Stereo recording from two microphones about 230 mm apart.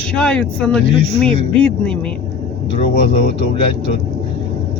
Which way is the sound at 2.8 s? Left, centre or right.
Left.